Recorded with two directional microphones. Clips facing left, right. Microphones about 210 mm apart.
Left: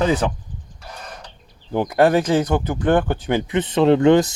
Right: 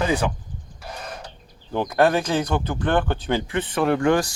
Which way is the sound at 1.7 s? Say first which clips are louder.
Left 3 dB; 15° left (ahead or behind).